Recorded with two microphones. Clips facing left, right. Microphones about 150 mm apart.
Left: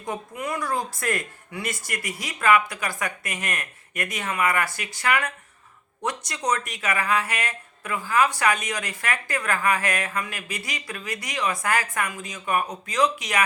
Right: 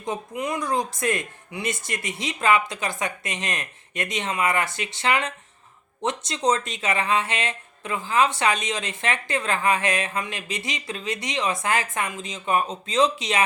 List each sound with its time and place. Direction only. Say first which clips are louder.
0.0 s speech: right 2 dB; 20° right (ahead or behind)